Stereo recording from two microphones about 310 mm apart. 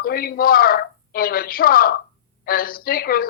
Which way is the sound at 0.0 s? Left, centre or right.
Left.